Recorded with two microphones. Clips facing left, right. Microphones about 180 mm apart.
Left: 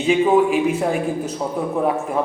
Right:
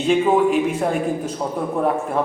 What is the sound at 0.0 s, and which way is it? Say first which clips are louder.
A man's voice: left 1 dB; 5° left (ahead or behind).